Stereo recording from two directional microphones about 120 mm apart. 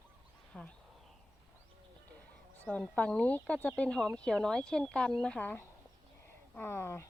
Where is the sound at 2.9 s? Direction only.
10° left (ahead or behind).